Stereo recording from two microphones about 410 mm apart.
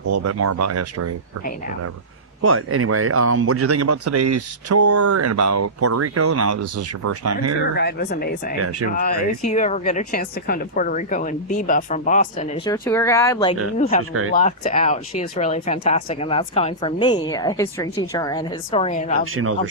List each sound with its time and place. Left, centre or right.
0.1 s speech: right
2.4 s speech: right
7.8 s speech: left
14.1 s speech: right
14.3 s speech: centre
19.2 s speech: right